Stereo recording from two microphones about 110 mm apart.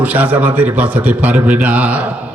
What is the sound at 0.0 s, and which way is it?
A man's voice, 15° right (ahead or behind).